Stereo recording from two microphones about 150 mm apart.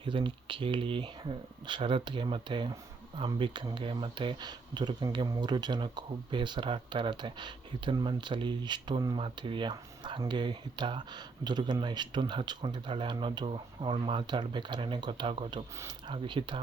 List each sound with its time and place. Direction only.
0.0 s speech: 35° right (ahead or behind)